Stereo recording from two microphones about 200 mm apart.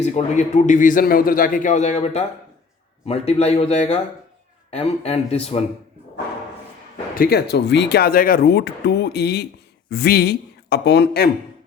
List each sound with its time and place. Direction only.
0.0 s a man's voice: 35° left (ahead or behind)
7.2 s speech: 50° left (ahead or behind)